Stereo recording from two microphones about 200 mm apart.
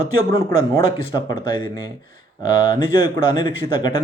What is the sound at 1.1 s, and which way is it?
Speech, 20° left (ahead or behind).